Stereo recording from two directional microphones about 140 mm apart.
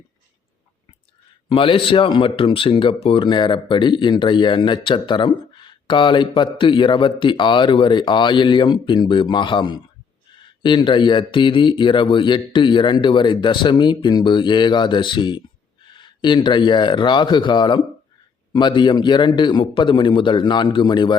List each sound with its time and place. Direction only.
1.5 s speech: 40° left (ahead or behind)